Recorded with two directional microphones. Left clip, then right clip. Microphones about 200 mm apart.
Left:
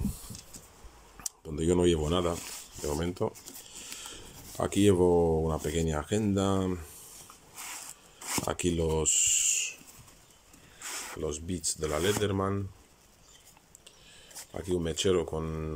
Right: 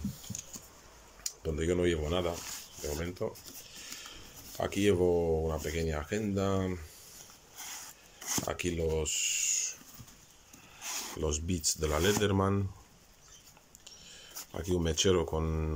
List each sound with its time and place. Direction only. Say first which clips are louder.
1.2 s a sound: left 1 dB; 25° left (ahead or behind)
2.8 s speech: left 5 dB; 15° left (ahead or behind)
8.5 s speech: left 4 dB; 20° left (ahead or behind)
10.8 s speech: even; centre (ahead or behind)
13.8 s speech: right 3 dB; centre (ahead or behind)